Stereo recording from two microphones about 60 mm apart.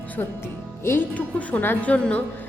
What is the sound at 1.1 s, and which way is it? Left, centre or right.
Speech, left.